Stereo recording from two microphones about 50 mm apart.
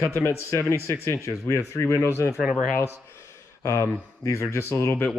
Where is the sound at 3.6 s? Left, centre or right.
Left.